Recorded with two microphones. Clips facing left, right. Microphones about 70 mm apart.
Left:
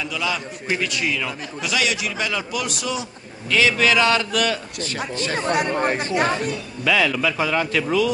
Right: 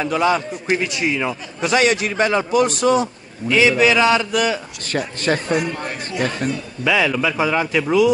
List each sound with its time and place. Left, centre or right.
0.0 s a man's voice: right
0.7 s speech: right
1.7 s a man's voice: right
3.4 s a man's voice: centre
4.8 s speech: right
5.5 s speech: left
6.8 s a man's voice: centre